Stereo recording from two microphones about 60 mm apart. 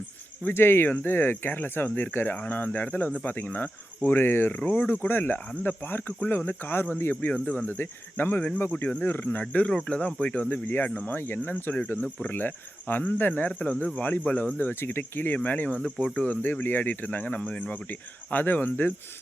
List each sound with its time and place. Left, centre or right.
0.4 s speech: left
8.7 s speech: left
9.4 s speech: left